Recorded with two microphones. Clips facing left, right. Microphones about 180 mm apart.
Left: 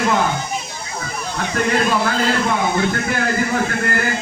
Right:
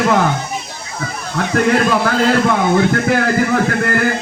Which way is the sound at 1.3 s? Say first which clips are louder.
Right 5 dB; 55° right (ahead or behind).